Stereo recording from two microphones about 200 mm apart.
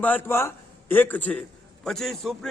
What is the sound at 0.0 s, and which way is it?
A man's voice, 10° left (ahead or behind).